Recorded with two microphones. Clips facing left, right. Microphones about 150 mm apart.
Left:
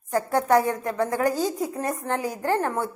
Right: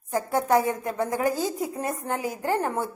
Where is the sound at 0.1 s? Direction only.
15° right (ahead or behind).